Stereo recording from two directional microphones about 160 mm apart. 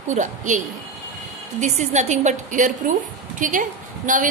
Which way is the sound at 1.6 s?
45° right (ahead or behind).